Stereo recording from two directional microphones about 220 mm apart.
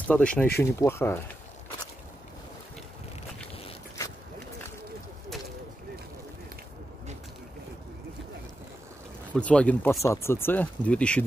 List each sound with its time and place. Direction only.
0.1 s speech: 5° left (ahead or behind)
9.3 s speech: 5° left (ahead or behind)